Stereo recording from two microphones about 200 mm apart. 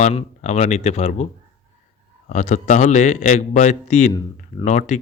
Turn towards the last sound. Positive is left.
turn(degrees=35)  # may be behind; listen again after turning